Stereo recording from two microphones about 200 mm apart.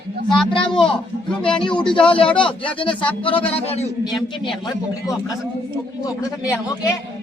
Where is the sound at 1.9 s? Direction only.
25° left (ahead or behind).